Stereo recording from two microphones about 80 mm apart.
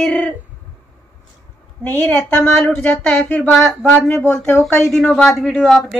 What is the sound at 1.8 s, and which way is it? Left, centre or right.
A woman's voice, left.